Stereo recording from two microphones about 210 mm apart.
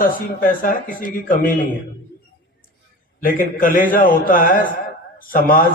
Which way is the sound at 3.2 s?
40° left (ahead or behind).